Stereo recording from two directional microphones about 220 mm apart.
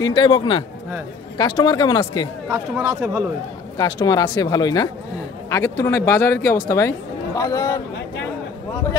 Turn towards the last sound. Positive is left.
turn(degrees=15)  # may be behind; listen again after turning